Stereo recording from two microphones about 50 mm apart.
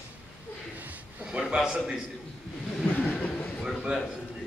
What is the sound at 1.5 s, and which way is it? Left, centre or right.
Speech, centre.